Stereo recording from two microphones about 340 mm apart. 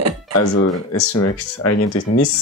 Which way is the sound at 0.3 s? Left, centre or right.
Left.